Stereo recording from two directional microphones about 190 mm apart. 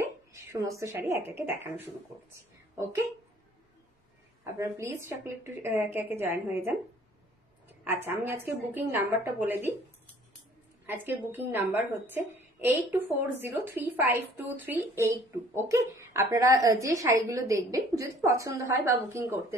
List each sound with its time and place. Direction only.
0.3 s a woman's voice: 15° right (ahead or behind)
4.6 s a woman's voice: 15° right (ahead or behind)
10.9 s a woman's voice: 10° right (ahead or behind)